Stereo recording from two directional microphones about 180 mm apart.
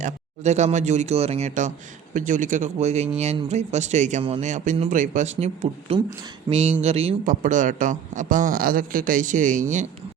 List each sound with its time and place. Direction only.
0.0 s a man's voice: 40° right (ahead or behind)
7.3 s a man's voice: 45° right (ahead or behind)